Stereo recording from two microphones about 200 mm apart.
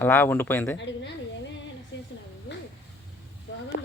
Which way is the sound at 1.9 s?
65° left (ahead or behind).